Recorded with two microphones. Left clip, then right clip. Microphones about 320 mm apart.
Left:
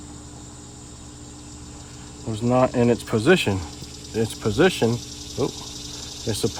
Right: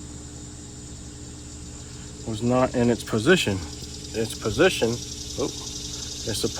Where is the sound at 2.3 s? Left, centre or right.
Left.